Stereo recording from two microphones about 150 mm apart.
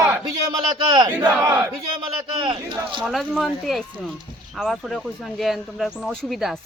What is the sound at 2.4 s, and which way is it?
Speech, 35° right (ahead or behind).